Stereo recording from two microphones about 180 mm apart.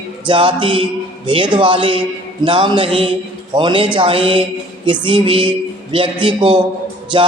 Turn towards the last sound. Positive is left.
turn(degrees=-25)  # may be behind; listen again after turning